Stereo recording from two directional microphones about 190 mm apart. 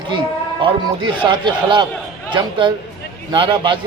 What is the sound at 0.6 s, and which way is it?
A man's voice, 25° right (ahead or behind).